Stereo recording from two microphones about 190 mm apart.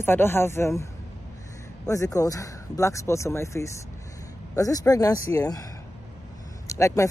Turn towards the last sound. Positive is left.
turn(degrees=15)  # may be behind; listen again after turning